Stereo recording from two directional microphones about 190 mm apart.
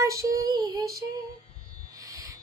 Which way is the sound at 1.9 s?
15° right (ahead or behind).